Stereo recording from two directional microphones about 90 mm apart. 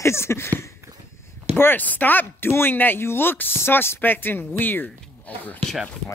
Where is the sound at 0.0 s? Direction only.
30° left (ahead or behind).